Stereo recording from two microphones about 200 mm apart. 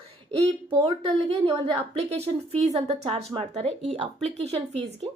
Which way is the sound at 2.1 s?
30° right (ahead or behind).